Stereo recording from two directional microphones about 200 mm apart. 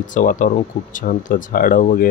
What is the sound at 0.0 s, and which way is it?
Speech, 40° left (ahead or behind).